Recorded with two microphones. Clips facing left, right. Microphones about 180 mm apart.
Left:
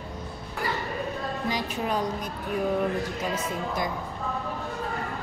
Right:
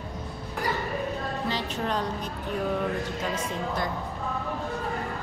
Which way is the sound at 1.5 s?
10° left (ahead or behind).